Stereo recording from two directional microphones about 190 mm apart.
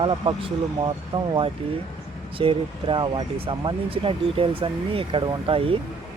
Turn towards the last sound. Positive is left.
turn(degrees=-30)  # may be behind; listen again after turning